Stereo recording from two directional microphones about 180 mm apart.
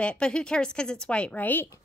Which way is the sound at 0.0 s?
5° left (ahead or behind).